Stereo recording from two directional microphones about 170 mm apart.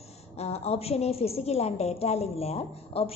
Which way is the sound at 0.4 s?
40° left (ahead or behind).